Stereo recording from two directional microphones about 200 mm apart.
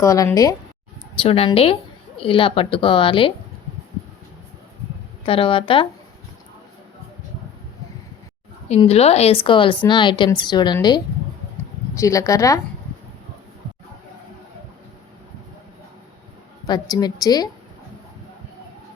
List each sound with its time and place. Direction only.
0.0 s speech: 15° left (ahead or behind)
1.2 s a woman's voice: 25° left (ahead or behind)
5.2 s a woman's voice: 25° left (ahead or behind)
8.7 s a woman's voice: 30° left (ahead or behind); by 12.5 s 15° left (ahead or behind)
16.6 s a woman's voice: 20° left (ahead or behind)